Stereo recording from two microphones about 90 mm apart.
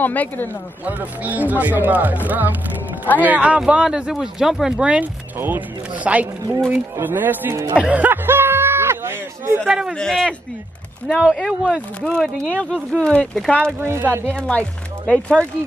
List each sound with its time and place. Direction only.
0.0 s speech: 20° left (ahead or behind)
0.8 s speech: 20° right (ahead or behind)
6.7 s speech: 20° right (ahead or behind)
7.7 s a sound: 15° right (ahead or behind)
9.7 s speech: 10° right (ahead or behind)
9.9 s speech: 5° left (ahead or behind)
11.3 s speech: 10° left (ahead or behind)
13.7 s speech: 25° right (ahead or behind)
14.3 s speech: 10° left (ahead or behind)